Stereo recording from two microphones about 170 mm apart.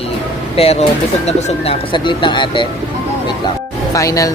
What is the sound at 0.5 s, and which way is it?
Speech, 35° left (ahead or behind).